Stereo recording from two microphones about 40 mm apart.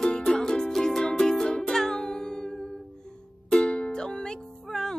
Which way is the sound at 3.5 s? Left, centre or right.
Left.